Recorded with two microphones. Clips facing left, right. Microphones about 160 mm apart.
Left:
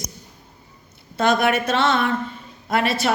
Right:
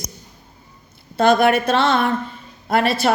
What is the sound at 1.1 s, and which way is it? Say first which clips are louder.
Speech: right 4 dB; 35° right (ahead or behind).